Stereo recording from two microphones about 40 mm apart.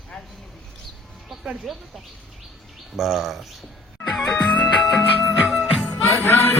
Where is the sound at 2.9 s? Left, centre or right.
Centre.